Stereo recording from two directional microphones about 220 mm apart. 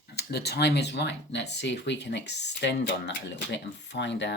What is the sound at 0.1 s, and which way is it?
Speech, 45° left (ahead or behind).